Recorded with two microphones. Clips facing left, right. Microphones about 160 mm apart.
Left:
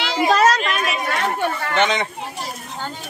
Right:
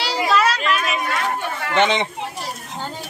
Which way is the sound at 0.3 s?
40° left (ahead or behind).